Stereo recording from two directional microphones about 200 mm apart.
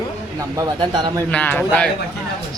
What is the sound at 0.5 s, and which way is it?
Speech, 20° right (ahead or behind).